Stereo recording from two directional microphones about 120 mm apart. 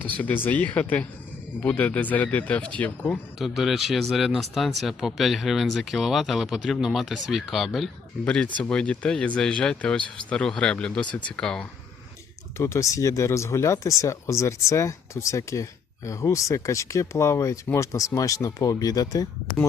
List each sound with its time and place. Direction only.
0.2 s speech: 15° left (ahead or behind)
3.3 s speech: centre (ahead or behind)
12.5 s speech: 25° left (ahead or behind)